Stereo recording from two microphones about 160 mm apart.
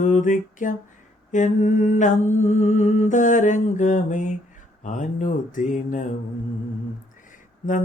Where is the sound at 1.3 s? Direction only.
50° left (ahead or behind).